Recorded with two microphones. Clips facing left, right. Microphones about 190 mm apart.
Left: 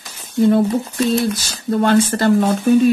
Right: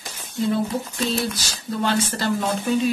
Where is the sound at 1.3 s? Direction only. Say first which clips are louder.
Left 8 dB; 55° left (ahead or behind).